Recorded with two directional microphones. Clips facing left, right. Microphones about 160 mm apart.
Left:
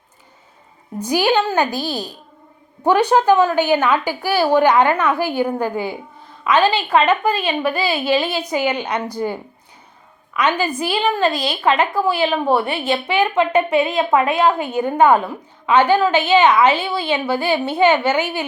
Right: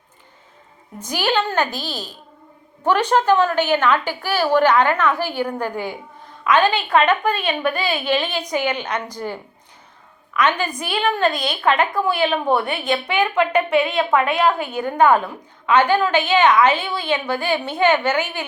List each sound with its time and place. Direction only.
0.9 s a woman's voice: 10° left (ahead or behind)
11.3 s a woman's voice: 30° left (ahead or behind)
11.6 s a woman's voice: 5° left (ahead or behind)
12.0 s a woman's voice: 30° left (ahead or behind)
12.3 s a woman's voice: 5° left (ahead or behind)
12.6 s a woman's voice: 30° left (ahead or behind)
14.7 s a woman's voice: 10° left (ahead or behind)